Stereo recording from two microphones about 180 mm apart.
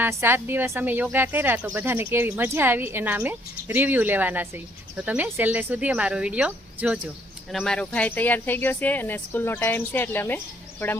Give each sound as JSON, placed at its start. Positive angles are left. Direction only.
{"t": 0.0, "sound": "speech", "side_deg": -15}